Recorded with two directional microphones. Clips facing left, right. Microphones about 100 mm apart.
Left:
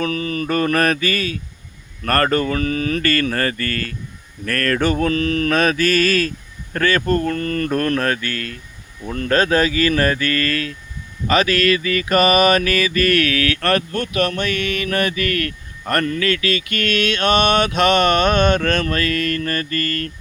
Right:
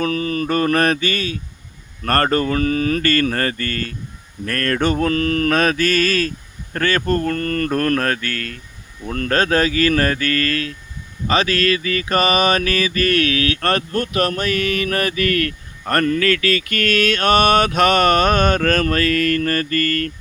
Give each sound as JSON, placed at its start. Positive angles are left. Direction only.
{"t": 0.0, "sound": "mantra", "side_deg": -35}
{"t": 2.0, "sound": "mantra", "side_deg": -35}